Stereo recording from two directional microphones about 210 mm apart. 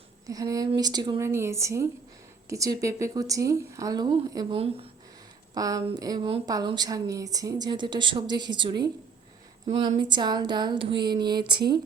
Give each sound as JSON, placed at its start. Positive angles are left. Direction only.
{"t": 0.3, "sound": "a woman's voice", "side_deg": -15}
{"t": 10.0, "sound": "a woman's voice", "side_deg": -20}